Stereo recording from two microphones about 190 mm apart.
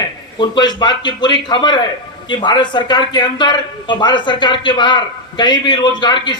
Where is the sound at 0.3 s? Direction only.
20° left (ahead or behind).